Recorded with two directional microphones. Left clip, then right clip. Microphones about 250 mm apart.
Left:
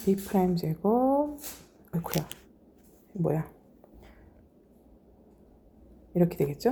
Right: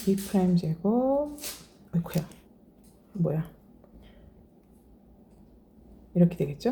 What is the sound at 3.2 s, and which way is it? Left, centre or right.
Speech, left.